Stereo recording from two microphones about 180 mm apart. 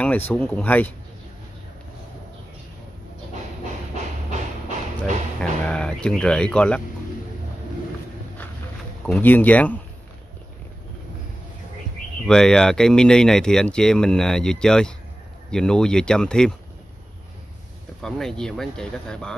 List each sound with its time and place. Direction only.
0.3 s speech: 10° left (ahead or behind)
4.3 s music: 40° right (ahead or behind)
5.4 s speech: 5° left (ahead or behind)
9.0 s speech: 10° left (ahead or behind)
12.3 s speech: 5° left (ahead or behind)
18.0 s speech: 5° left (ahead or behind)